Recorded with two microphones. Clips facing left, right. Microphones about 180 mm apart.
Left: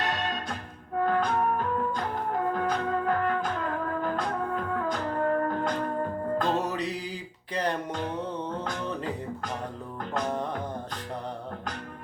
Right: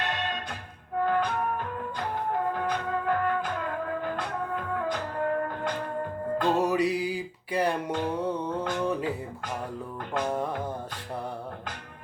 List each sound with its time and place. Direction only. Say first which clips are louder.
0.0 s music: left 1 dB; 40° left (ahead or behind)
6.6 s music: right 6 dB; 10° right (ahead or behind)